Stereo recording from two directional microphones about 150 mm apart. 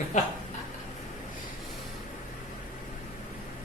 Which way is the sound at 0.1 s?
55° left (ahead or behind).